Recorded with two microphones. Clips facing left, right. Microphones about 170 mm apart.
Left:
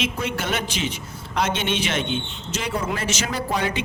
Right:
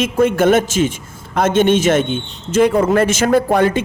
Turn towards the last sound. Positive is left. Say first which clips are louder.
# right 12 dB
turn(degrees=-50)  # may be behind; listen again after turning